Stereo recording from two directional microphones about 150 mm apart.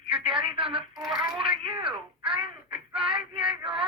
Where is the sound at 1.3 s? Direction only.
35° right (ahead or behind).